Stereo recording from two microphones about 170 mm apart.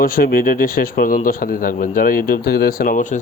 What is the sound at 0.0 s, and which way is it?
Speech, 60° left (ahead or behind).